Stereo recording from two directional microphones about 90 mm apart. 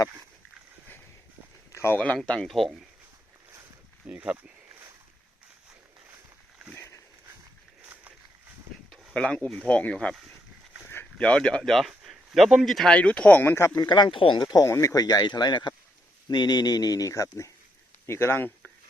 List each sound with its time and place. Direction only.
1.7 s a sound: 30° left (ahead or behind)
2.1 s speech: 10° left (ahead or behind)
4.0 s speech: 15° right (ahead or behind)
6.7 s a sound: 25° left (ahead or behind)
9.1 s speech: 10° left (ahead or behind)
11.2 s speech: 10° left (ahead or behind)
13.4 s speech: 30° left (ahead or behind)
13.8 s speech: 60° left (ahead or behind)
14.4 s speech: 45° left (ahead or behind); by 18.5 s 25° left (ahead or behind)